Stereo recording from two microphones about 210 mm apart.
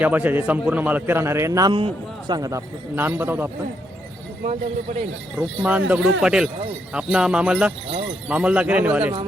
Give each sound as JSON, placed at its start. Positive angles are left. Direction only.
{"t": 0.0, "sound": "a man's voice", "side_deg": -10}
{"t": 5.4, "sound": "a man's voice", "side_deg": -5}